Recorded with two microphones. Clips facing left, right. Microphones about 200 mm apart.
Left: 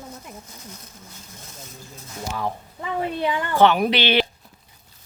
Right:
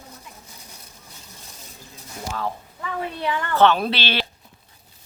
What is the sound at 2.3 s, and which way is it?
A woman's voice, 15° left (ahead or behind).